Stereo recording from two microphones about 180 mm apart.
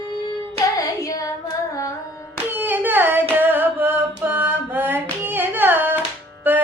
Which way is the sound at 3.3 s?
10° right (ahead or behind).